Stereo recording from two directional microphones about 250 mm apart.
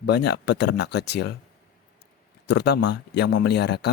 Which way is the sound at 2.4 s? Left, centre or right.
Left.